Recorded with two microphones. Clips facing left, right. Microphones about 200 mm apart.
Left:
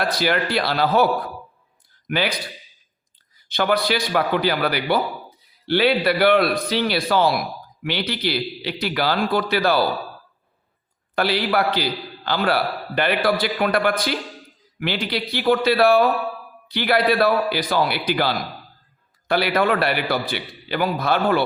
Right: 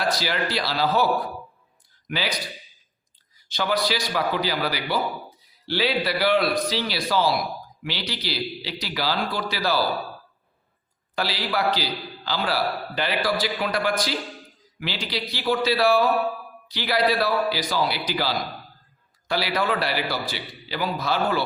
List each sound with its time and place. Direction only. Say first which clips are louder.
0.0 s a man's voice: left 4 dB; 55° left (ahead or behind)
2.0 s speech: left 6 dB; 60° left (ahead or behind)
3.5 s a man's voice: left 4 dB; 60° left (ahead or behind)
11.1 s a man's voice: left 6 dB; 60° left (ahead or behind)